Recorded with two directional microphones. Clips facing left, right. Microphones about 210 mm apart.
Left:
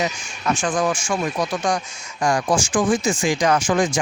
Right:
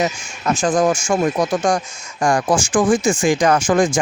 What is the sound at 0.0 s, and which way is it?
Speech, 40° right (ahead or behind).